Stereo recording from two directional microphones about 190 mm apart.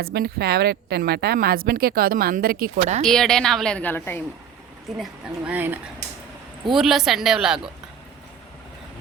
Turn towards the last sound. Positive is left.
turn(degrees=-5)  # may be behind; listen again after turning